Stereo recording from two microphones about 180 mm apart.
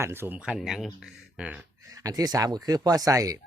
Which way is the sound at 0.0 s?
15° right (ahead or behind).